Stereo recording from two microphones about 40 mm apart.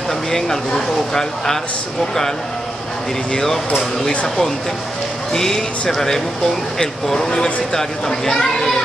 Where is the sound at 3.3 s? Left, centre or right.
Centre.